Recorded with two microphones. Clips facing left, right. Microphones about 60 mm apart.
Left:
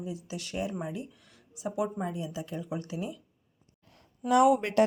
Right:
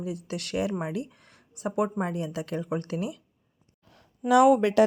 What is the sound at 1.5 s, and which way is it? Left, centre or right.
Speech, right.